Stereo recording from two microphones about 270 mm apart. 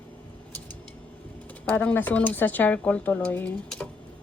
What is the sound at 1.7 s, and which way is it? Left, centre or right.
Speech, centre.